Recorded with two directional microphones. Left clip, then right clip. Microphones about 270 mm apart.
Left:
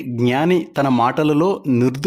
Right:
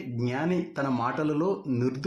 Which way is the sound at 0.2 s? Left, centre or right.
Left.